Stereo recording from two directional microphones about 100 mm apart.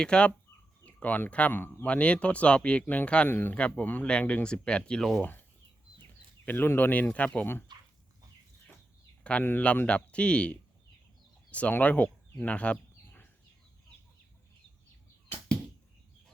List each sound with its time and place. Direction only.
0.0 s speech: 10° left (ahead or behind)
3.5 s speech: 10° left (ahead or behind)
6.4 s speech: 20° left (ahead or behind)
9.2 s speech: 15° left (ahead or behind)